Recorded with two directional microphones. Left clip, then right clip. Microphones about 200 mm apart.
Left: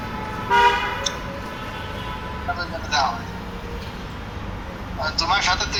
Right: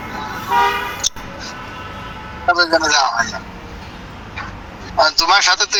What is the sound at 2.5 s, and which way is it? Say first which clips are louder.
Speech: right 9 dB; 45° right (ahead or behind).